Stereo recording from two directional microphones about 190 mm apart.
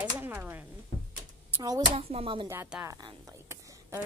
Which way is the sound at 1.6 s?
20° right (ahead or behind).